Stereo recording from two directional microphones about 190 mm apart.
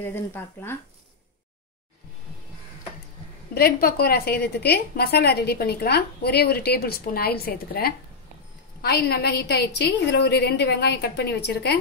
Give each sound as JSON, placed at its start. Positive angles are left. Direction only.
{"t": 0.0, "sound": "speech", "side_deg": 10}
{"t": 3.5, "sound": "a woman's voice", "side_deg": 55}